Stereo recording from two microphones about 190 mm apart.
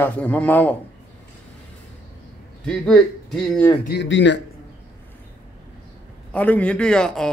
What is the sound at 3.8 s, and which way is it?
Speech, 70° left (ahead or behind).